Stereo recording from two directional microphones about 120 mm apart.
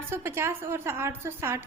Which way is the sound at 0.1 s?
20° right (ahead or behind).